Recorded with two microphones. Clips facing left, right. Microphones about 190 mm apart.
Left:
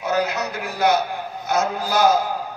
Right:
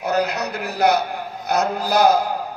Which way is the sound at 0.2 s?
65° right (ahead or behind).